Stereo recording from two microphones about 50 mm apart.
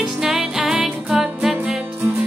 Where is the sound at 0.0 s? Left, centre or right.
Centre.